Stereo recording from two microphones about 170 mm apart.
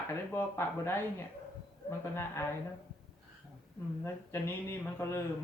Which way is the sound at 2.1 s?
15° left (ahead or behind).